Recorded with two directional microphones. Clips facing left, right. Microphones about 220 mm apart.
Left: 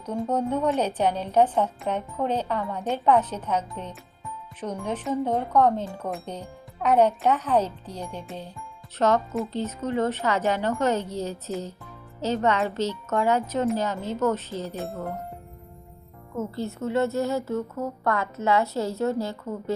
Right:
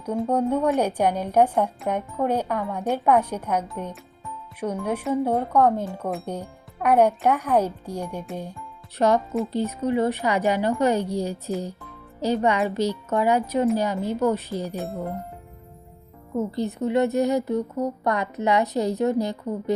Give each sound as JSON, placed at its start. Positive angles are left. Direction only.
{"t": 0.0, "sound": "speech", "side_deg": -10}
{"t": 16.3, "sound": "speech", "side_deg": -15}